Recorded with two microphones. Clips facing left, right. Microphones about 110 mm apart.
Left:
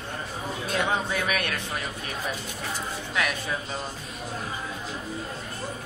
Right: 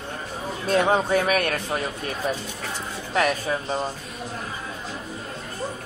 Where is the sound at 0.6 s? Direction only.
40° right (ahead or behind).